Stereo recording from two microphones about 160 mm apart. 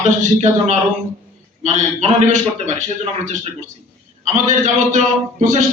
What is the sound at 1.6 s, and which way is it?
A man's voice, 50° right (ahead or behind).